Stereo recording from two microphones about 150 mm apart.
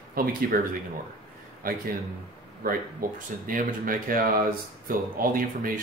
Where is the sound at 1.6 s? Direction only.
75° right (ahead or behind).